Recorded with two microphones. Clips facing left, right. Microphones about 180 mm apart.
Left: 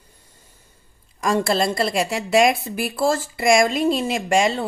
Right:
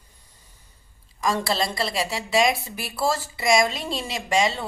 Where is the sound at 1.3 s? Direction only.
50° left (ahead or behind).